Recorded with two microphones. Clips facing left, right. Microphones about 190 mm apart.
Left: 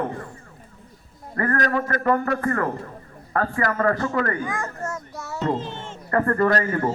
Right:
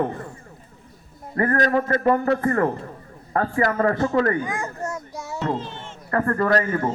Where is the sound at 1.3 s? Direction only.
25° right (ahead or behind).